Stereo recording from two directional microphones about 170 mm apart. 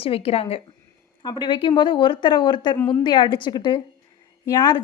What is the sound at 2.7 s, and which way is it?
Speech, 10° left (ahead or behind).